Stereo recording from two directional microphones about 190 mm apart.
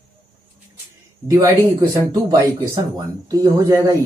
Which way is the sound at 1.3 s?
15° right (ahead or behind).